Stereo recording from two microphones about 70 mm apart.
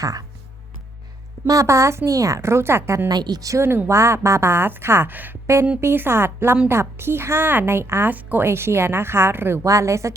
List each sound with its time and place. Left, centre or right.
0.0 s speech: right
1.5 s a woman's voice: right
3.1 s a woman's voice: right
3.5 s a woman's voice: right
8.1 s a woman's voice: right
8.4 s a woman's voice: right
9.6 s a woman's voice: right